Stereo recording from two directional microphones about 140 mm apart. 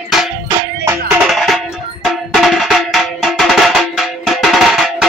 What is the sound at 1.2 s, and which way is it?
Music, centre (ahead or behind).